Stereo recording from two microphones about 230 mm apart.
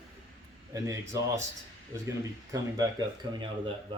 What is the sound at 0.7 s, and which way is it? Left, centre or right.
Speech, centre.